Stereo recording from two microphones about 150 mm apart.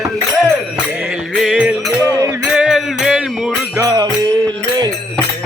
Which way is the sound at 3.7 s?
25° right (ahead or behind).